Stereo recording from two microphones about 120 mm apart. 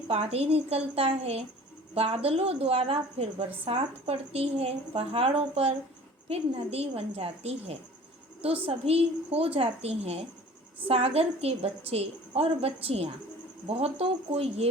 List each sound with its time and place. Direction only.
0.1 s a woman's voice: 55° right (ahead or behind)